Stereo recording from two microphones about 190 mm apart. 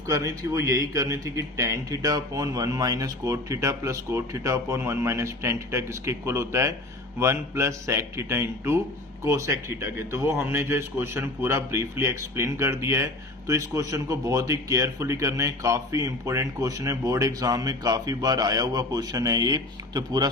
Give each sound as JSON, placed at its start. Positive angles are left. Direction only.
{"t": 0.1, "sound": "a man's voice", "side_deg": -15}